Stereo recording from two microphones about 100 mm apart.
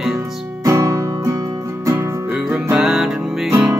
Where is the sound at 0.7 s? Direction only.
30° right (ahead or behind).